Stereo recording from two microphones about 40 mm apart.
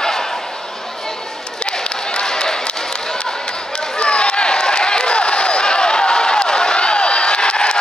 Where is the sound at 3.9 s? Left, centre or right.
Left.